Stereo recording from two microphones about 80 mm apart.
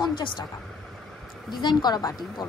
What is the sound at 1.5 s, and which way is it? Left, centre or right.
A woman's voice, left.